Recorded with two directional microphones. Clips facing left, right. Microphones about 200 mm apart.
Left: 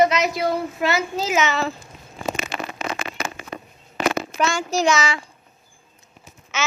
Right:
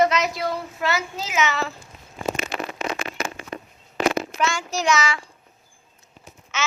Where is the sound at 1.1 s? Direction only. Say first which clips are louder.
Left 4 dB; 35° left (ahead or behind).